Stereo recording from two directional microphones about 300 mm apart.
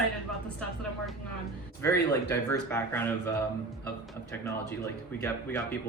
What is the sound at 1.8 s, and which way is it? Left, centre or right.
Speech, centre.